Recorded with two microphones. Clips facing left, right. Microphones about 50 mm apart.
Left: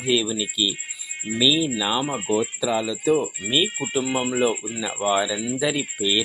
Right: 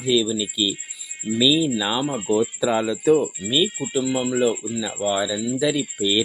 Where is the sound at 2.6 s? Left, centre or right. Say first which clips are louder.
Right 3 dB; right.